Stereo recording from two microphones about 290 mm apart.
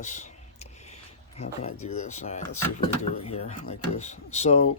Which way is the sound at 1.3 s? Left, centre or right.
Left.